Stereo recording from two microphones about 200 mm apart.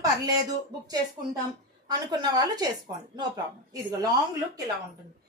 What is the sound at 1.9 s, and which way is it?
A woman's voice, 20° right (ahead or behind).